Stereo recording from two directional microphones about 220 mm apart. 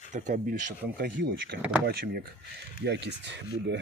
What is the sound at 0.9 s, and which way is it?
Speech, 45° right (ahead or behind).